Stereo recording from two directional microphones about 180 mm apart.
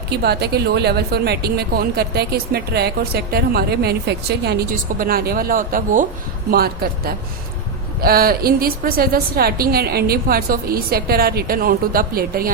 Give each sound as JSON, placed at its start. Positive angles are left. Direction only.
{"t": 0.2, "sound": "speech", "side_deg": -65}